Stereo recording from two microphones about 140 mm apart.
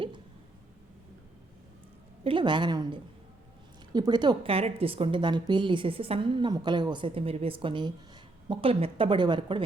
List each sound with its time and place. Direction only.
2.2 s a woman's voice: 35° right (ahead or behind)
4.5 s a woman's voice: 45° right (ahead or behind)